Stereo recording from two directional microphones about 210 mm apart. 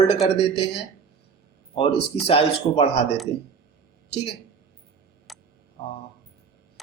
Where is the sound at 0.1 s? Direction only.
25° left (ahead or behind).